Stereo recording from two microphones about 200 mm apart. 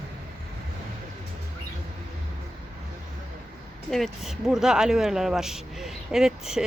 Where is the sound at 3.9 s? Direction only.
Centre (ahead or behind).